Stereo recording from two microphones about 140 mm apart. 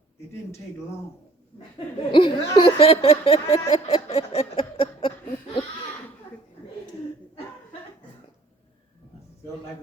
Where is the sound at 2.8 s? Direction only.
50° left (ahead or behind).